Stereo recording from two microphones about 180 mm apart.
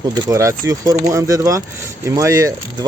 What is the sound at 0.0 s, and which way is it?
Speech, 20° right (ahead or behind).